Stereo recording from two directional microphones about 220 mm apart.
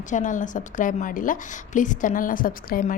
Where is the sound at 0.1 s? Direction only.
35° left (ahead or behind).